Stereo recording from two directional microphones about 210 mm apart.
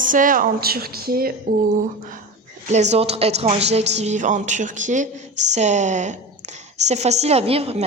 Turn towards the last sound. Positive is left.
turn(degrees=-30)  # may be behind; listen again after turning